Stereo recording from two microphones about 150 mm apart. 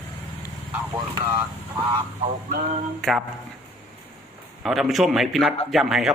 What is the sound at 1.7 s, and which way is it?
Speech, 35° right (ahead or behind).